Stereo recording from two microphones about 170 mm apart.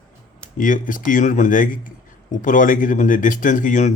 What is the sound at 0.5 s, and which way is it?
Speech, 50° left (ahead or behind).